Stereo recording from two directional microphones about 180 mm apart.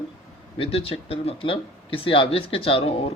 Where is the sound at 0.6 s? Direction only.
30° left (ahead or behind).